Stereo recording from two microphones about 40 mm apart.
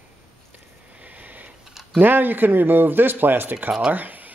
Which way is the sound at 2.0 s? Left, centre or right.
Right.